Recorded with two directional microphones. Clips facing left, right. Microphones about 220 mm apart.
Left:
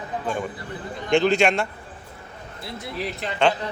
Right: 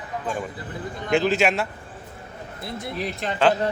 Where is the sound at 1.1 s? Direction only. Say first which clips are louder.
Left 2 dB; 5° right (ahead or behind).